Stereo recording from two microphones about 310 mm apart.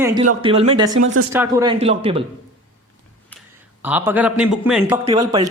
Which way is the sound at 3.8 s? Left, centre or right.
Centre.